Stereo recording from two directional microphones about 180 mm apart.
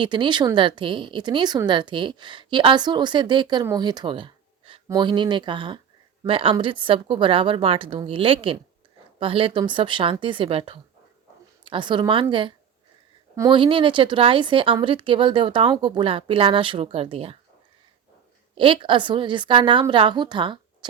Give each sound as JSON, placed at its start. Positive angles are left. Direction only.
{"t": 0.0, "sound": "a woman's voice", "side_deg": -25}
{"t": 18.5, "sound": "speech", "side_deg": -30}